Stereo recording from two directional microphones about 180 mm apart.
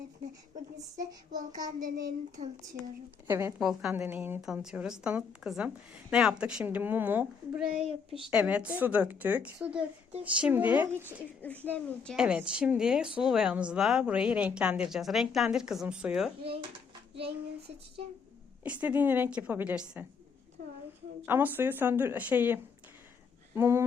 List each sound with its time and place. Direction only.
1.3 s child singing: 20° right (ahead or behind)
2.4 s a woman's voice: 40° right (ahead or behind)
3.2 s a woman's voice: 15° right (ahead or behind)
3.6 s speech: centre (ahead or behind)
3.9 s speech: 10° right (ahead or behind)
7.7 s a woman's voice: 35° right (ahead or behind)
8.3 s a woman's voice: 5° right (ahead or behind)
11.4 s speech: 10° left (ahead or behind)
12.1 s speech: 5° right (ahead or behind)
16.4 s a woman's voice: 30° right (ahead or behind)
18.6 s a woman's voice: 10° right (ahead or behind)
21.2 s a woman's voice: 10° right (ahead or behind)